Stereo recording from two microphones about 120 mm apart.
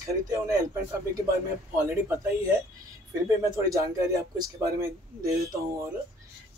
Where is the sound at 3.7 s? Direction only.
30° right (ahead or behind).